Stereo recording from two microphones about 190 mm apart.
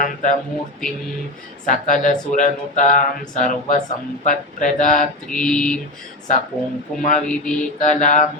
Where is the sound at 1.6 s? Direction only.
40° left (ahead or behind).